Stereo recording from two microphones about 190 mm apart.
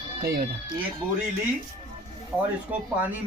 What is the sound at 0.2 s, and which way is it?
Speech, 50° right (ahead or behind).